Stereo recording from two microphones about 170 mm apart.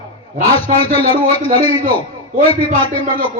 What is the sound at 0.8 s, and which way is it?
Speech, 35° left (ahead or behind).